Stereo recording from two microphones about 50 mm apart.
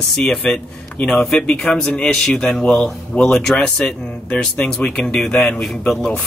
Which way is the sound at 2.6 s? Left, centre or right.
Centre.